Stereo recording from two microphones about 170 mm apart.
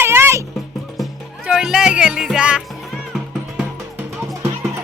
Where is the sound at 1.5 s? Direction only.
5° right (ahead or behind).